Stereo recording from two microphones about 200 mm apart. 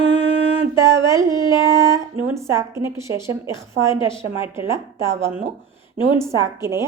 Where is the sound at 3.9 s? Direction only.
25° left (ahead or behind).